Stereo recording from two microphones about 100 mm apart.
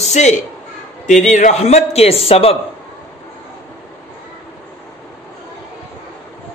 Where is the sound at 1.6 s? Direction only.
90° left.